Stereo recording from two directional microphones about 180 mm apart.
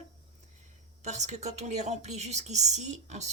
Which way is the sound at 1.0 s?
40° right (ahead or behind).